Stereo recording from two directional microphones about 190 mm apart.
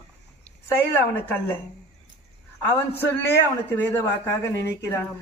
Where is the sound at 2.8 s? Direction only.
10° left (ahead or behind).